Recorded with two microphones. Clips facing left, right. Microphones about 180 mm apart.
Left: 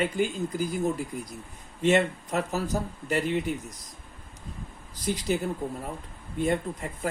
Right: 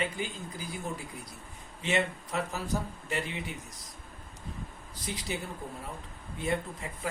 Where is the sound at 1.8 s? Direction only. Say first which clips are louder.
Left 8 dB; 45° left (ahead or behind).